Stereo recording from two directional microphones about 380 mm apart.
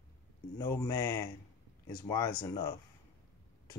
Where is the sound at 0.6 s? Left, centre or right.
Centre.